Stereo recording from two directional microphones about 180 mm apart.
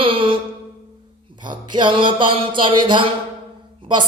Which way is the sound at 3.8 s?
30° right (ahead or behind).